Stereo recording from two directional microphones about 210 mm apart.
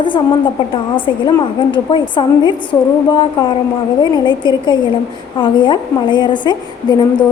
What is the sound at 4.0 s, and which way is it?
A woman's voice, 20° left (ahead or behind).